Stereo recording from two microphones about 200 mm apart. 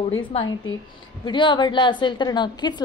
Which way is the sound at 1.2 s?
25° left (ahead or behind).